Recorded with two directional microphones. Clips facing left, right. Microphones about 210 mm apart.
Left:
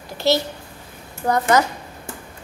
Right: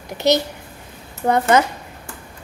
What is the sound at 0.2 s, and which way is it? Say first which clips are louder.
Speech: right 2 dB; 20° right (ahead or behind).